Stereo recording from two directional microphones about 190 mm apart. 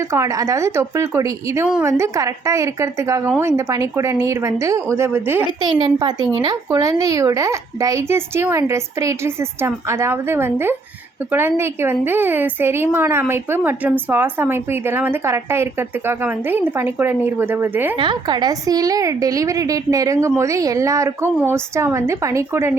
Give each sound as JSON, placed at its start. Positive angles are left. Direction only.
{"t": 0.1, "sound": "a woman's voice", "side_deg": -15}
{"t": 5.6, "sound": "a woman's voice", "side_deg": -25}
{"t": 17.9, "sound": "a woman's voice", "side_deg": -25}